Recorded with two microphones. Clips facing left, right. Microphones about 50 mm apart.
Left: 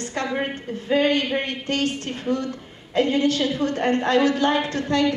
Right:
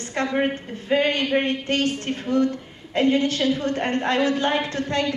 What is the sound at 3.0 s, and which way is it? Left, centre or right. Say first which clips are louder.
A woman's voice: even; right.